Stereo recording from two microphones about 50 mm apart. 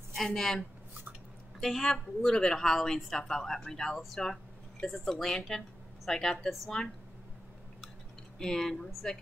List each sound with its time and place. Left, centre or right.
0.1 s speech: centre
1.6 s a woman's voice: centre
8.4 s a woman's voice: centre